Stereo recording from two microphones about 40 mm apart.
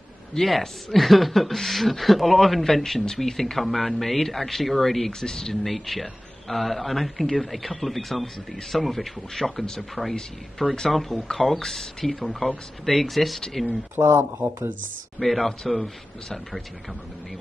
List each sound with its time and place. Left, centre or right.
0.5 s speech: centre
13.9 s speech: right
15.1 s speech: centre